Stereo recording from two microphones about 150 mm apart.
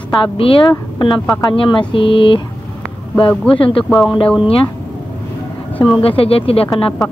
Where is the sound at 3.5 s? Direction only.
35° left (ahead or behind).